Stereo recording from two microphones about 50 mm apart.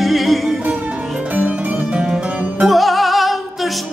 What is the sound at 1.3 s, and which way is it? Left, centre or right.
Music, right.